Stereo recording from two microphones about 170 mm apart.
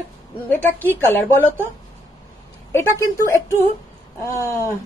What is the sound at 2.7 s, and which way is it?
A woman's voice, 15° left (ahead or behind).